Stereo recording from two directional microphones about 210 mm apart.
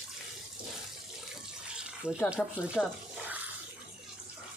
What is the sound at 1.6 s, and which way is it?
Water, 5° right (ahead or behind).